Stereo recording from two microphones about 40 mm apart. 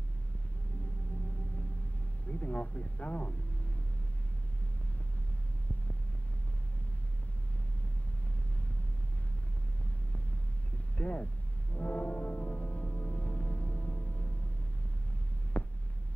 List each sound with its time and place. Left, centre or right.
2.2 s speech: left
11.0 s speech: left
11.7 s music: left
15.5 s heart sounds: left